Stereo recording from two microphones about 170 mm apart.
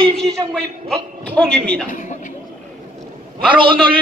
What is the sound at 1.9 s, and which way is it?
Speech, 50° left (ahead or behind).